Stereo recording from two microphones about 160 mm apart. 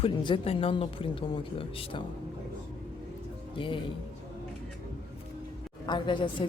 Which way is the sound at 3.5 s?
30° left (ahead or behind).